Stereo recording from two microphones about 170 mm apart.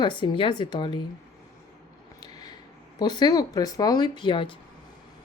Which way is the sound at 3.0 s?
25° left (ahead or behind).